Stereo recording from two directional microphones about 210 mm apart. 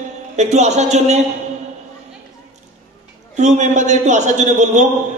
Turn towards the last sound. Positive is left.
turn(degrees=-35)  # may be behind; listen again after turning